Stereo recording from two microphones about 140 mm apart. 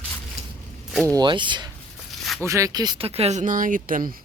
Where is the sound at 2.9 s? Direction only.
45° right (ahead or behind); by 4.2 s 80° right.